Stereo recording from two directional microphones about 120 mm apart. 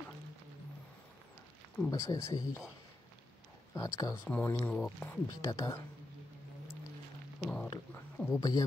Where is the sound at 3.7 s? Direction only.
30° left (ahead or behind).